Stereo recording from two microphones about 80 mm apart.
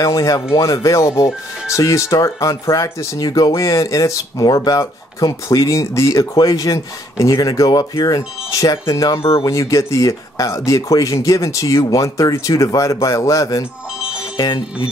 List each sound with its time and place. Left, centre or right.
0.0 s speech: left
3.2 s speech: left